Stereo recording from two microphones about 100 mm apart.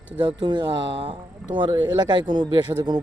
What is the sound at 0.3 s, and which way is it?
A woman's voice, 50° right (ahead or behind).